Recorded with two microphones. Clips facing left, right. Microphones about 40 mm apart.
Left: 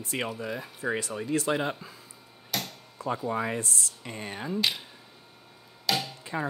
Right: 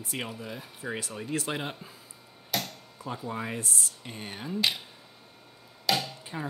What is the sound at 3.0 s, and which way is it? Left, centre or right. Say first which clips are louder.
Speech: left 6 dB; left.